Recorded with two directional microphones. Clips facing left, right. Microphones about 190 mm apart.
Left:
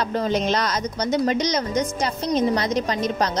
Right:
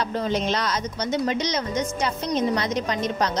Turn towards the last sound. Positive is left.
turn(degrees=35)  # may be behind; listen again after turning